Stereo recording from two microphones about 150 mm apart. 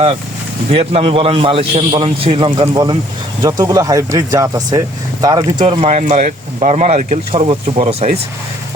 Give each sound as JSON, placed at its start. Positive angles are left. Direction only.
{"t": 0.7, "sound": "a man's voice", "side_deg": -40}
{"t": 5.8, "sound": "speech", "side_deg": -50}